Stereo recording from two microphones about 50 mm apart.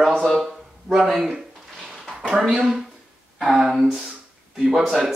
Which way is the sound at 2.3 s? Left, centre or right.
Centre.